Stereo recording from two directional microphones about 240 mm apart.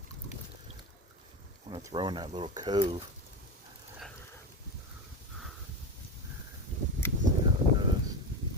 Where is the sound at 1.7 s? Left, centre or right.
Centre.